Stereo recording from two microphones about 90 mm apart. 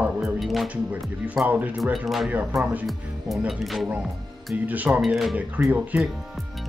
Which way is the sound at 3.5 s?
Centre (ahead or behind).